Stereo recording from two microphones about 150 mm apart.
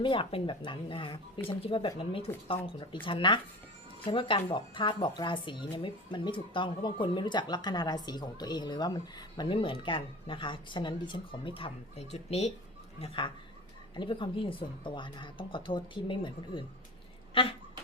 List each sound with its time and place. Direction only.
0.0 s speech: 35° left (ahead or behind)